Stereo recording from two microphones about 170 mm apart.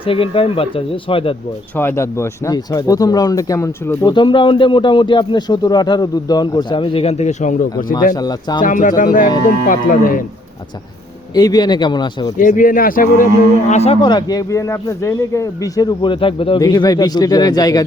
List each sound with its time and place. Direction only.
0.0 s speech: 30° left (ahead or behind)
1.7 s speech: 15° left (ahead or behind); by 7.9 s 50° left (ahead or behind)
8.1 s speech: 25° left (ahead or behind)
8.6 s speech: 50° left (ahead or behind)
11.3 s speech: 25° left (ahead or behind)
12.4 s speech: 50° left (ahead or behind)
13.7 s speech: 40° left (ahead or behind); by 17.8 s 20° left (ahead or behind)